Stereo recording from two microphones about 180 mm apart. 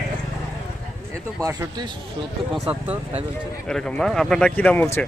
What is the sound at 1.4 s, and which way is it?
Speech, 15° right (ahead or behind).